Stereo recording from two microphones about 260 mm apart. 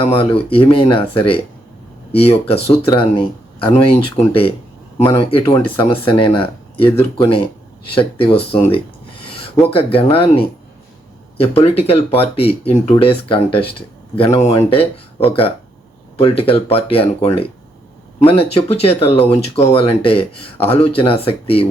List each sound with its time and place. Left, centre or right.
0.0 s speech: left